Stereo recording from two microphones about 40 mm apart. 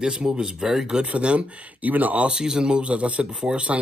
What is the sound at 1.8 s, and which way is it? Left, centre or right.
Speech, right.